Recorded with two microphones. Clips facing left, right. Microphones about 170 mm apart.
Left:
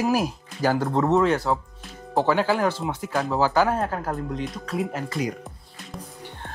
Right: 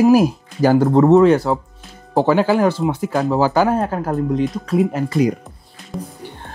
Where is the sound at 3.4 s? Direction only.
15° right (ahead or behind).